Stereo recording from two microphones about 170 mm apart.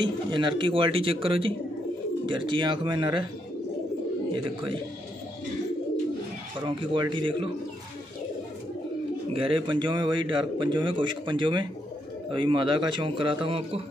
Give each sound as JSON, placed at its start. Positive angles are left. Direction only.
{"t": 0.0, "sound": "a man's voice", "side_deg": -30}
{"t": 6.6, "sound": "a man's voice", "side_deg": -25}
{"t": 9.3, "sound": "a man's voice", "side_deg": -30}